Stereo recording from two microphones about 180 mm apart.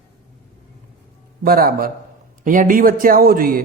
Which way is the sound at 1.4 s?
55° right (ahead or behind).